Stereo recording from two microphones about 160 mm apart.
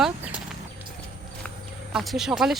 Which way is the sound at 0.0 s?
5° right (ahead or behind).